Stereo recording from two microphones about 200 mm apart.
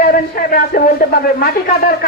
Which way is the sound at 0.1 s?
45° left (ahead or behind).